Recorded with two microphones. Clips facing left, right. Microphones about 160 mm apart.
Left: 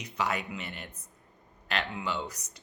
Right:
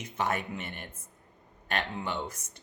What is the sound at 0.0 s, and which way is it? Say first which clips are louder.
Speech: right 1 dB; 50° right (ahead or behind).